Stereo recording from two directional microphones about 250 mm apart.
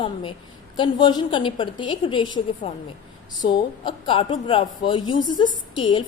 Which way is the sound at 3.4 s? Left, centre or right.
Centre.